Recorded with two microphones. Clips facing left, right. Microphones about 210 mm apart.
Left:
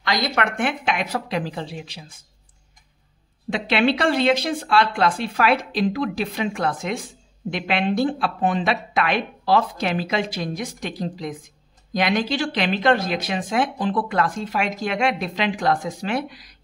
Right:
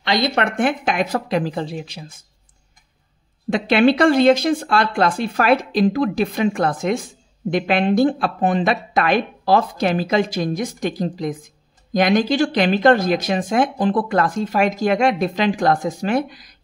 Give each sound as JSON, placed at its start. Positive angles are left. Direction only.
{"t": 0.0, "sound": "speech", "side_deg": -25}
{"t": 0.6, "sound": "speech", "side_deg": -40}
{"t": 3.4, "sound": "speech", "side_deg": -45}